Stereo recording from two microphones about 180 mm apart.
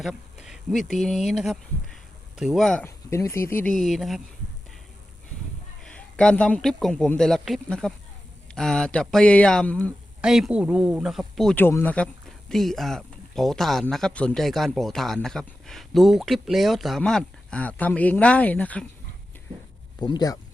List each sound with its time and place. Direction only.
0.0 s speech: centre (ahead or behind)
2.8 s speech: 15° left (ahead or behind)
3.8 s speech: centre (ahead or behind)
5.8 s speech: 5° left (ahead or behind)
10.2 s speech: 5° right (ahead or behind)
11.5 s speech: 10° left (ahead or behind)
20.0 s speech: 25° left (ahead or behind)